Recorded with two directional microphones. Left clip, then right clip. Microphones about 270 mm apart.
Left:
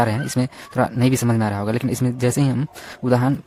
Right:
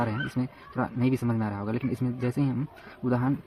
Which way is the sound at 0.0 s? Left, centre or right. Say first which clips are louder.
Left 9 dB; left.